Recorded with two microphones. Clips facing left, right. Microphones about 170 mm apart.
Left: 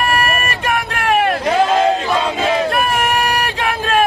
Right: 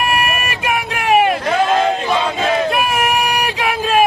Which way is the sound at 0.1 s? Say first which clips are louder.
Left 1 dB; 5° right (ahead or behind).